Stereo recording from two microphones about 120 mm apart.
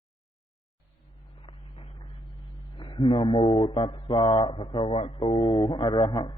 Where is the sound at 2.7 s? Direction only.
40° left (ahead or behind).